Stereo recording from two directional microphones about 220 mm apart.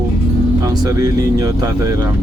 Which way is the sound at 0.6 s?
15° right (ahead or behind).